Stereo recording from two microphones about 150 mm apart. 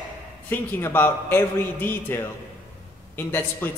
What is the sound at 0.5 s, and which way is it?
Speech, 15° left (ahead or behind).